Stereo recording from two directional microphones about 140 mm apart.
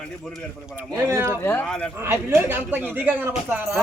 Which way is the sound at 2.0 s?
15° right (ahead or behind).